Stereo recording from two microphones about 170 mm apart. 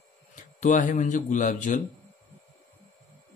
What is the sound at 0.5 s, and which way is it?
Speech, 50° left (ahead or behind).